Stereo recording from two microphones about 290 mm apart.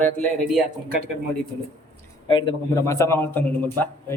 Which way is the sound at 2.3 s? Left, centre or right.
Centre.